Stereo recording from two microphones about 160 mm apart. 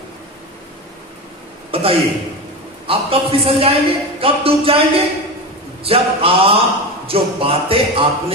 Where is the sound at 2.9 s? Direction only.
35° right (ahead or behind).